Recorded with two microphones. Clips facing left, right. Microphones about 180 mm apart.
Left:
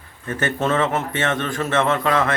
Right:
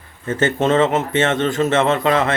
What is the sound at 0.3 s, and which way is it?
Speech, 25° right (ahead or behind).